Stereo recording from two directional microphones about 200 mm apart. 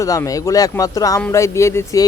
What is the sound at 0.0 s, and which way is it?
Speech, 15° left (ahead or behind).